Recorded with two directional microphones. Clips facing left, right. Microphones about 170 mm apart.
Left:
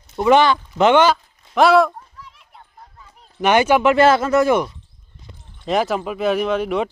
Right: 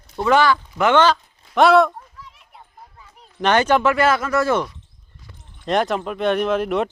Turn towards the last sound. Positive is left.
turn(degrees=0)  # may be behind; listen again after turning